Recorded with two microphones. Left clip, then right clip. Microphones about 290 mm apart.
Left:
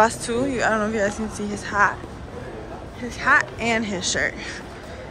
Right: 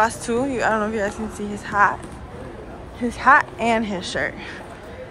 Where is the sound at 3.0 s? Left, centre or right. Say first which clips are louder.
Right 4 dB; centre.